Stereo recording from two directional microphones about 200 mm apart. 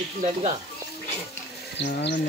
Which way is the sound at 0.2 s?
30° right (ahead or behind).